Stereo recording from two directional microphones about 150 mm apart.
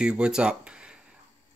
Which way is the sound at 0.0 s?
5° right (ahead or behind).